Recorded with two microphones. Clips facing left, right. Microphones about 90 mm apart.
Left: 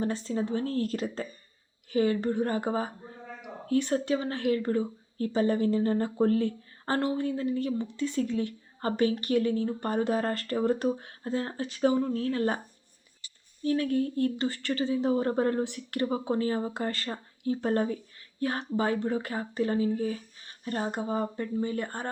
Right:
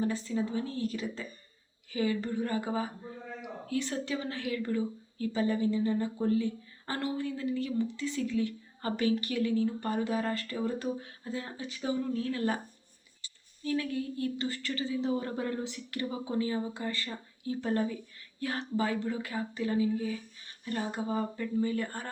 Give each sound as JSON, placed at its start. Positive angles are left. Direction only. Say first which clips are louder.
{"t": 0.3, "sound": "speech", "louder": "left 3 dB", "side_deg": 45}
{"t": 0.8, "sound": "speech", "louder": "left 4 dB", "side_deg": 65}
{"t": 1.9, "sound": "speech", "louder": "left 5 dB", "side_deg": 40}
{"t": 4.1, "sound": "speech", "louder": "left 8 dB", "side_deg": 40}
{"t": 10.8, "sound": "speech", "louder": "left 6 dB", "side_deg": 40}
{"t": 11.9, "sound": "speech", "louder": "left 4 dB", "side_deg": 45}
{"t": 13.7, "sound": "speech", "louder": "left 6 dB", "side_deg": 40}
{"t": 17.1, "sound": "speech", "louder": "left 5 dB", "side_deg": 40}